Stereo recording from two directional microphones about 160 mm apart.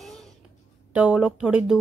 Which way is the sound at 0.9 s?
5° right (ahead or behind).